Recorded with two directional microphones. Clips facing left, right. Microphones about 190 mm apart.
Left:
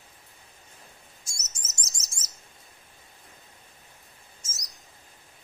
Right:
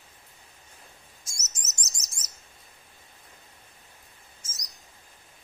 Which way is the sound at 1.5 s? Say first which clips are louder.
Even; 30° left (ahead or behind).